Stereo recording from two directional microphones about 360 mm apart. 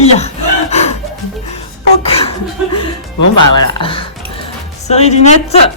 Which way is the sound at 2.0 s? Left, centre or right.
Centre.